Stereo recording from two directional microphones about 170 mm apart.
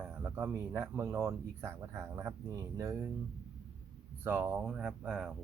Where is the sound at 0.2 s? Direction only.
15° right (ahead or behind).